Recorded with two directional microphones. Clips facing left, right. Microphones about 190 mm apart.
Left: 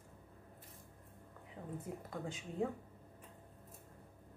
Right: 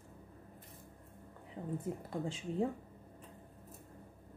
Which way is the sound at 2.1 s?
30° right (ahead or behind).